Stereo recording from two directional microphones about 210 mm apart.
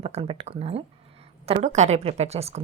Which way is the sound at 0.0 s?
30° right (ahead or behind).